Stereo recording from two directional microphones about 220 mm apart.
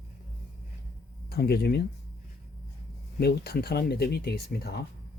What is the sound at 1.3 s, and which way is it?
Speech, 45° left (ahead or behind).